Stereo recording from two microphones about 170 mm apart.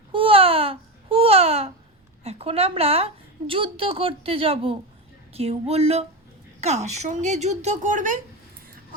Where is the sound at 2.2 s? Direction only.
35° right (ahead or behind).